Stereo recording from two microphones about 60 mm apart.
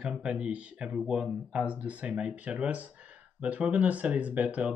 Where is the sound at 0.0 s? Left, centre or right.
Centre.